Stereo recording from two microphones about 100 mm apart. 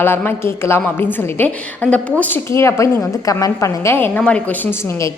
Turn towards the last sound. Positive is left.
turn(degrees=15)  # may be behind; listen again after turning